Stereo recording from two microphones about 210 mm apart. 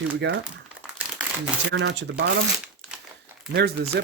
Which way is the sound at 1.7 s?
55° right (ahead or behind).